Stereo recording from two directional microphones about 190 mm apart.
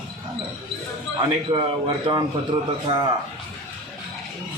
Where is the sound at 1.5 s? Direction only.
25° right (ahead or behind).